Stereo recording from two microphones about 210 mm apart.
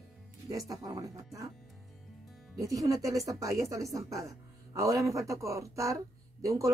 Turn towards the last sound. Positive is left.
turn(degrees=-15)  # may be behind; listen again after turning